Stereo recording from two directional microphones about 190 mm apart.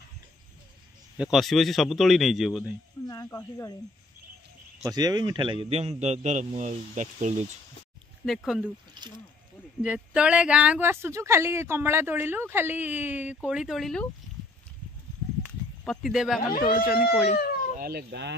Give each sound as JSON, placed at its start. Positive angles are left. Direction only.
{"t": 1.1, "sound": "a man's voice", "side_deg": -5}
{"t": 3.1, "sound": "speech", "side_deg": 15}
{"t": 4.8, "sound": "a man's voice", "side_deg": -20}
{"t": 8.3, "sound": "a man's voice", "side_deg": 0}
{"t": 9.8, "sound": "a man's voice", "side_deg": -5}
{"t": 15.8, "sound": "speech", "side_deg": 0}
{"t": 16.7, "sound": "speech", "side_deg": 50}
{"t": 17.7, "sound": "speech", "side_deg": -55}